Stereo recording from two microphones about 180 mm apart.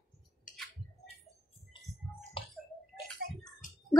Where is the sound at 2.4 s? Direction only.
30° left (ahead or behind).